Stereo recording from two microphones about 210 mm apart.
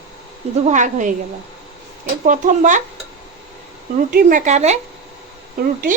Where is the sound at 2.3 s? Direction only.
35° right (ahead or behind).